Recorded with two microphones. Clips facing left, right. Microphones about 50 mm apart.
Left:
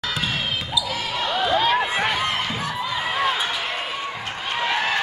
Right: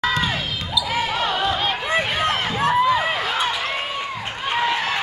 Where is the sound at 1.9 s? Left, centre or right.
Right.